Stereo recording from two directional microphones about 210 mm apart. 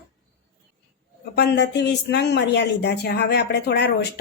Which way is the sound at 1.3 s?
50° left (ahead or behind).